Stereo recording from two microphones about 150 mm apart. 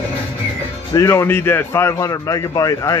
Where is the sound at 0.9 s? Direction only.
15° left (ahead or behind).